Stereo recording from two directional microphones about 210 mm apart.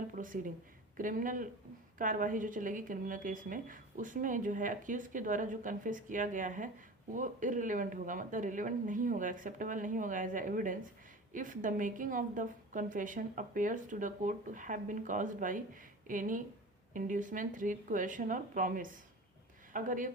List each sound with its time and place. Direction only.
0.2 s a woman's voice: 40° right (ahead or behind)